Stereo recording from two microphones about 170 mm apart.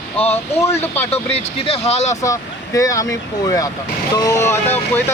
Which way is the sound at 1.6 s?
35° left (ahead or behind).